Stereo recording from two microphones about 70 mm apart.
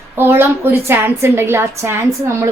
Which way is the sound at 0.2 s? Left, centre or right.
Right.